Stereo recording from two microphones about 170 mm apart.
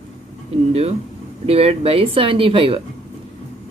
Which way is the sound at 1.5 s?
35° right (ahead or behind).